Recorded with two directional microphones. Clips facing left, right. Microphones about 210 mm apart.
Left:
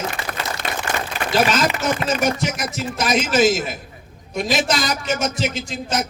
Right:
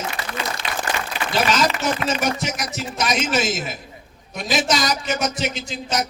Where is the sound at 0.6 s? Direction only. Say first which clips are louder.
Left 3 dB; 45° left (ahead or behind).